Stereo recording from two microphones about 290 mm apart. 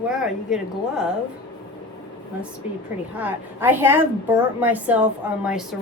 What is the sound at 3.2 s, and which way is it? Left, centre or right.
A woman's voice, centre.